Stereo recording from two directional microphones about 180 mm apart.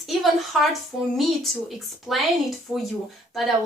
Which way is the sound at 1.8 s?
Centre (ahead or behind).